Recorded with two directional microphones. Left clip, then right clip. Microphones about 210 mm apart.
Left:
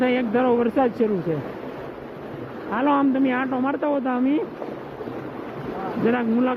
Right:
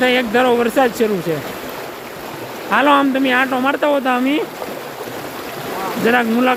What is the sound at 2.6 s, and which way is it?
Speech, 15° right (ahead or behind).